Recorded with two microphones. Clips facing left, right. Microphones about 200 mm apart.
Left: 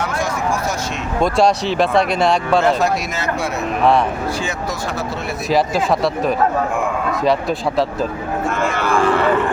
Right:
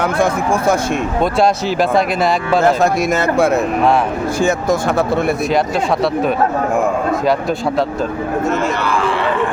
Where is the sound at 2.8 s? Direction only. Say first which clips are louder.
Right 5 dB; 50° right (ahead or behind).